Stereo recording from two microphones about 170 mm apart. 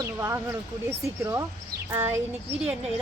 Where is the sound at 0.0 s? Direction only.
15° right (ahead or behind).